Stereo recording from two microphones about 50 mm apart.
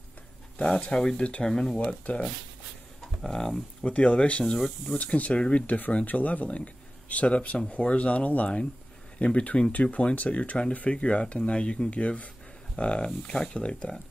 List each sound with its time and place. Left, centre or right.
0.7 s speech: centre
1.5 s speech: centre
3.2 s speech: centre
3.8 s speech: left
4.6 s speech: centre
4.9 s speech: left